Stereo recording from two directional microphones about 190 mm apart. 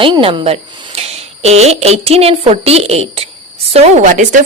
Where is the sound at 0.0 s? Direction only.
25° right (ahead or behind).